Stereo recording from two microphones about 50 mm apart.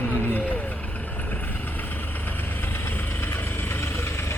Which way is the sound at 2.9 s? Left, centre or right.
Left.